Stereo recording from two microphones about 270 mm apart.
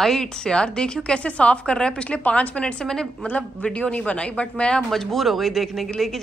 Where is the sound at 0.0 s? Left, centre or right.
Centre.